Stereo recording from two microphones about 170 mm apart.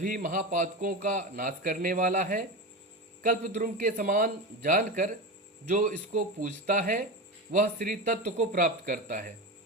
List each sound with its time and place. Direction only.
0.0 s a man's voice: 50° right (ahead or behind)